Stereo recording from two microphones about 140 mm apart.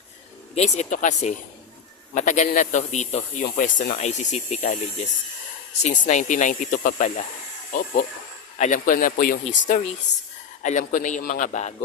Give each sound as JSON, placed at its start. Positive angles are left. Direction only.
{"t": 0.5, "sound": "a man's voice", "side_deg": 55}
{"t": 8.5, "sound": "a man's voice", "side_deg": 60}
{"t": 9.4, "sound": "speech", "side_deg": 60}